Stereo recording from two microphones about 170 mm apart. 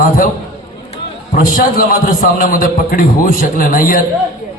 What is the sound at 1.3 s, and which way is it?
A man's voice, 55° left (ahead or behind).